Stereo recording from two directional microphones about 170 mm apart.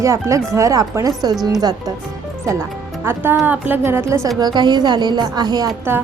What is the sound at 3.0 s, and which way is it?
A woman's voice, 15° right (ahead or behind).